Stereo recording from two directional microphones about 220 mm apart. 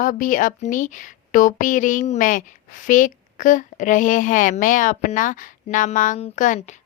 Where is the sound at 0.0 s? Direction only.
35° left (ahead or behind).